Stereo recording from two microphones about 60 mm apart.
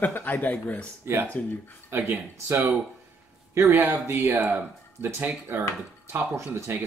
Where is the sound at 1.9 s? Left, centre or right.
Right.